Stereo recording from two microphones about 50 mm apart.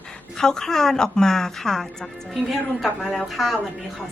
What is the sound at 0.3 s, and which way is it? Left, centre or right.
A woman's voice, centre.